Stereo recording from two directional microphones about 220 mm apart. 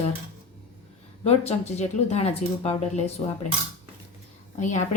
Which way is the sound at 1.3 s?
30° left (ahead or behind).